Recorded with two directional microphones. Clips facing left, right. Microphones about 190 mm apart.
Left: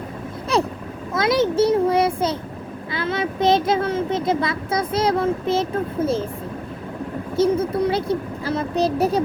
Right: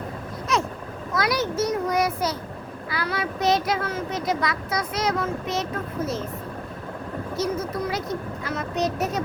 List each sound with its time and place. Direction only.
0.5 s vehicle: 30° left (ahead or behind)
1.1 s a child's voice: 25° left (ahead or behind)
7.3 s a child's voice: 30° left (ahead or behind)